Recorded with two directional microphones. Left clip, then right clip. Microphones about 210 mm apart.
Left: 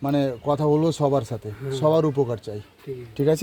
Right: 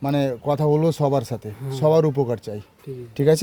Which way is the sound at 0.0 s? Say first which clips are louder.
Right 1 dB; 20° right (ahead or behind).